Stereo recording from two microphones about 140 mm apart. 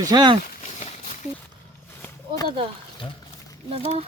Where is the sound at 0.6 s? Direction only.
55° left (ahead or behind).